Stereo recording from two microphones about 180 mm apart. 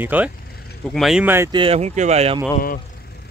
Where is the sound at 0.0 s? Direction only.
10° right (ahead or behind).